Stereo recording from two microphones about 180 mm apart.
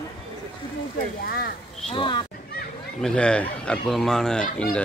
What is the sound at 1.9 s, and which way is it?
Speech, 25° left (ahead or behind).